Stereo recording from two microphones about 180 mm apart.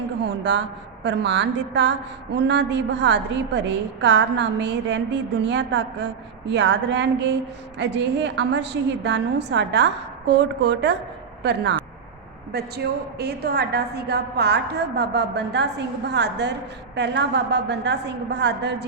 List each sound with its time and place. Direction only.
0.3 s a woman's voice: 75° right (ahead or behind)